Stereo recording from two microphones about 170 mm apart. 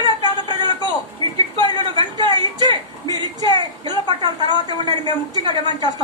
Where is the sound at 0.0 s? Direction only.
25° right (ahead or behind).